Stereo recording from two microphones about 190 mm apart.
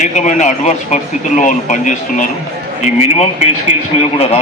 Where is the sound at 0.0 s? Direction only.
40° left (ahead or behind).